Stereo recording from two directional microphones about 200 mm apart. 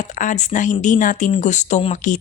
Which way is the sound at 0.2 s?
40° left (ahead or behind).